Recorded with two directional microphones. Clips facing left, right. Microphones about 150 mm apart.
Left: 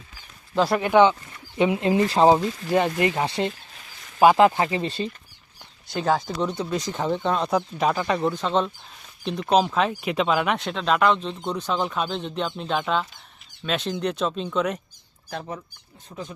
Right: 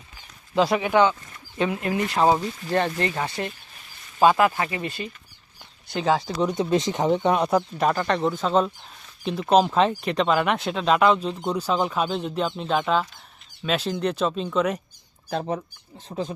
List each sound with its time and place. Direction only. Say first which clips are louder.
0.5 s speech: even; centre (ahead or behind)
1.5 s speech: left 4 dB; 20° left (ahead or behind)
2.6 s speech: left 2 dB; 10° left (ahead or behind); by 5.1 s 30° left (ahead or behind)
5.9 s speech: even; centre (ahead or behind)
6.4 s speech: right 4 dB; 15° right (ahead or behind)
7.5 s speech: right 1 dB; centre (ahead or behind)
15.3 s speech: right 6 dB; 30° right (ahead or behind)